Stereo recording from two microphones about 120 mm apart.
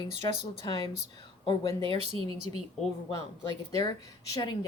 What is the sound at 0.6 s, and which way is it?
Speech, 30° left (ahead or behind).